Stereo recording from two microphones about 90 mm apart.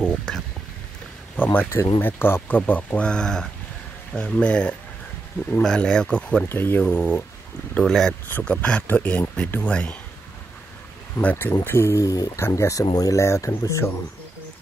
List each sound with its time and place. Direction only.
0.0 s a sound: 10° left (ahead or behind)
1.3 s speech: 20° left (ahead or behind)
6.5 s speech: 25° left (ahead or behind)
7.7 s speech: 5° left (ahead or behind)
8.3 s speech: 20° left (ahead or behind)
11.1 s speech: 20° left (ahead or behind)
11.6 s speech: 30° left (ahead or behind)